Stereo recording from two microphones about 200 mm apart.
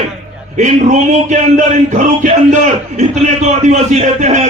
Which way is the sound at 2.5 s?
35° right (ahead or behind).